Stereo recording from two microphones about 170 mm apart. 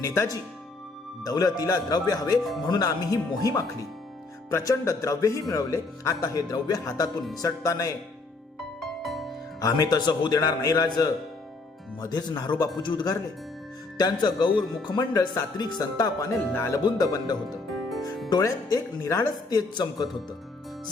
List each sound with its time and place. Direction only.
0.0 s speech: 15° left (ahead or behind)
9.0 s music: centre (ahead or behind)
9.6 s speech: 20° left (ahead or behind)